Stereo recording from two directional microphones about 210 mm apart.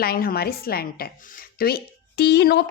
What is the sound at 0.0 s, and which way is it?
Speech, 45° left (ahead or behind).